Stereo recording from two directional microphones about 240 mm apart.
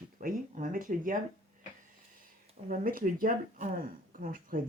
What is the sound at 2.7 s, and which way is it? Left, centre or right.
Speech, right.